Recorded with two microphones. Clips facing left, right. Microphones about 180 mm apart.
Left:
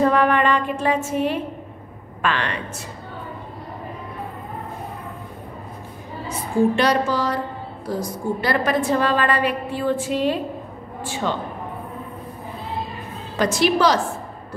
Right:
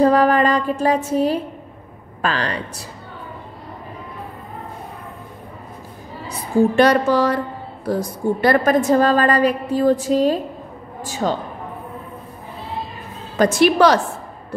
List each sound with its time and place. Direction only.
0.0 s a sound: 35° right (ahead or behind)
2.2 s a woman's voice: 35° right (ahead or behind)
6.2 s a woman's voice: 50° right (ahead or behind)
13.4 s a woman's voice: 55° right (ahead or behind)